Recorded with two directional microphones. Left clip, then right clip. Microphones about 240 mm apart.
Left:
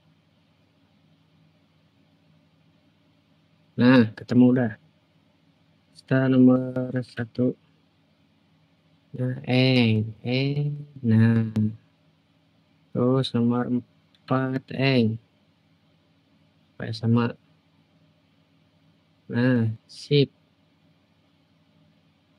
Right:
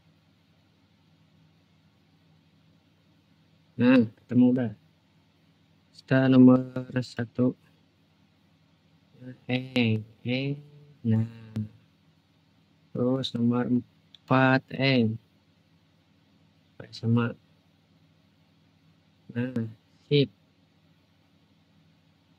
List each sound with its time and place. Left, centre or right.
3.7 s speech: centre
5.9 s speech: centre
9.5 s speech: centre
13.0 s speech: centre
16.7 s speech: centre
19.3 s speech: centre